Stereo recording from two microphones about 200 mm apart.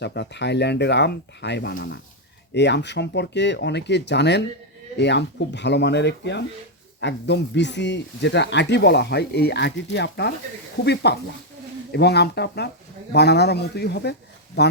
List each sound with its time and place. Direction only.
0.0 s speech: 60° left (ahead or behind)